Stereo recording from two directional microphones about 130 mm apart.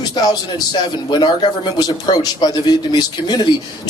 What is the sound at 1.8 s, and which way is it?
Speech, 30° left (ahead or behind).